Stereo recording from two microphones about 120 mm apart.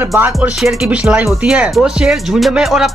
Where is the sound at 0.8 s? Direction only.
5° right (ahead or behind).